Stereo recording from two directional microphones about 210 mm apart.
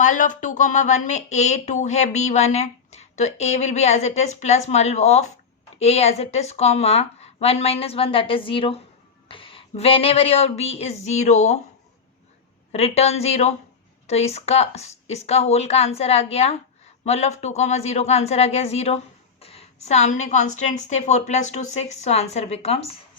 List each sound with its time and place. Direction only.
0.0 s a woman's voice: 35° left (ahead or behind)
12.7 s a woman's voice: 30° left (ahead or behind)